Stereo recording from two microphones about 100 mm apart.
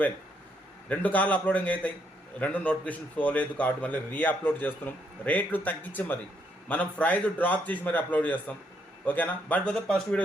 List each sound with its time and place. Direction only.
0.9 s a man's voice: 15° left (ahead or behind)